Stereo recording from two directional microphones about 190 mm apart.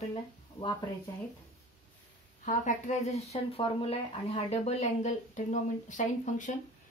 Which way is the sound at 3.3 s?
30° left (ahead or behind).